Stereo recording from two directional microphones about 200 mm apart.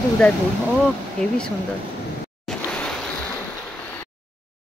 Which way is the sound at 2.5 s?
5° left (ahead or behind).